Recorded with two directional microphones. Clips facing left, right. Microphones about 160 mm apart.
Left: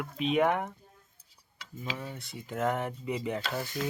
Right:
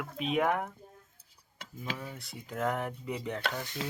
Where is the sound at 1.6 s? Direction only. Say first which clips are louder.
Right 1 dB; 50° right (ahead or behind).